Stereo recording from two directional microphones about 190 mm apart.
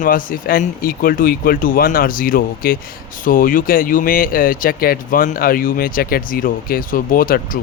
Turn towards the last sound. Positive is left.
turn(degrees=50)  # may be behind; listen again after turning